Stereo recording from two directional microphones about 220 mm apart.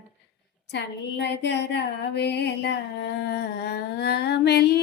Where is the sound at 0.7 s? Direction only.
50° left (ahead or behind).